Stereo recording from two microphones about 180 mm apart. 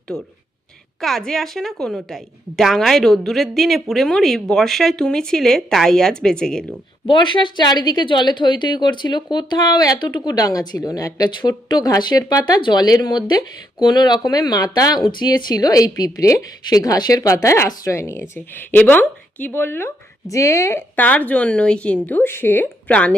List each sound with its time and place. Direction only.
0.1 s a woman's voice: 5° left (ahead or behind)
7.1 s a woman's voice: 25° left (ahead or behind); by 23.1 s 5° left (ahead or behind)